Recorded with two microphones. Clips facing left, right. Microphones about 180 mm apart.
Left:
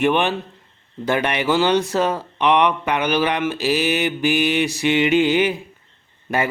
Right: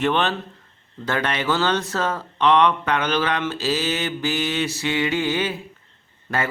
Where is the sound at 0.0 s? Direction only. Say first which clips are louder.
Left 3 dB; 10° left (ahead or behind).